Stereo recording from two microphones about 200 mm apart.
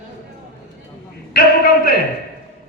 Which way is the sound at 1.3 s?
45° left (ahead or behind).